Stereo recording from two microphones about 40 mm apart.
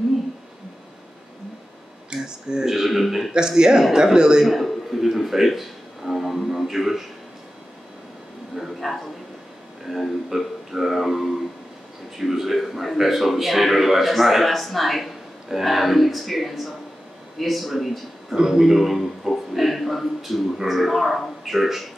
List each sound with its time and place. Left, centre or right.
2.1 s speech: centre
2.7 s speech: centre
3.3 s speech: centre
4.5 s music: centre
8.5 s speech: centre
18.3 s speech: centre